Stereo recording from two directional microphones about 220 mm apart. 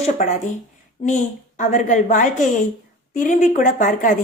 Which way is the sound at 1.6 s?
35° left (ahead or behind).